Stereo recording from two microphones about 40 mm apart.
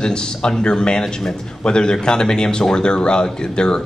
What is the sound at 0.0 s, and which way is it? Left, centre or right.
A man's voice, left.